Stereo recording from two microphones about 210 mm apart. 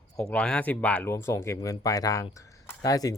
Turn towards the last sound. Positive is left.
turn(degrees=15)  # may be behind; listen again after turning